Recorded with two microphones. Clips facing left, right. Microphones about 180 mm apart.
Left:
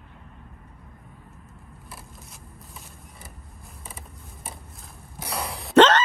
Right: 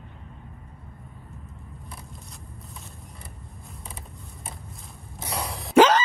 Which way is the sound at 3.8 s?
Centre (ahead or behind).